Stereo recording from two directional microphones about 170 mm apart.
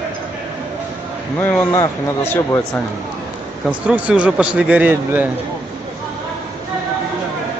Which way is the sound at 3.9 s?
5° right (ahead or behind).